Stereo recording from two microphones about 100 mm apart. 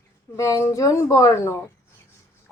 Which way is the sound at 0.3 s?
30° left (ahead or behind).